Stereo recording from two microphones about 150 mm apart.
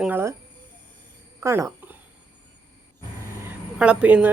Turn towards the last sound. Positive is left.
turn(degrees=-10)  # may be behind; listen again after turning